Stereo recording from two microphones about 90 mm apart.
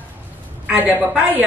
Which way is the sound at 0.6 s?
20° right (ahead or behind).